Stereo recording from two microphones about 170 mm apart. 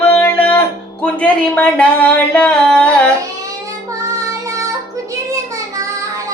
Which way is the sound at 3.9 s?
20° right (ahead or behind).